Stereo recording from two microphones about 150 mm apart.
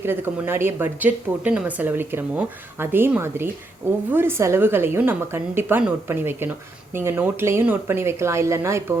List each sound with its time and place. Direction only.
0.0 s speech: 15° right (ahead or behind)